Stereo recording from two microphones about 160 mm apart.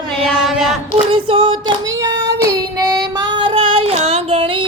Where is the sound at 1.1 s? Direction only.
30° right (ahead or behind).